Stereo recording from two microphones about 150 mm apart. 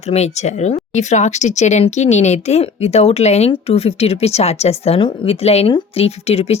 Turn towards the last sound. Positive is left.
turn(degrees=45)  # may be behind; listen again after turning